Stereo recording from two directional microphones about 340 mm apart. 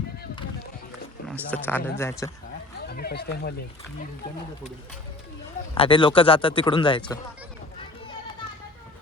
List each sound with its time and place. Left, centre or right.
1.3 s speech: centre
2.8 s speech: left
5.7 s speech: centre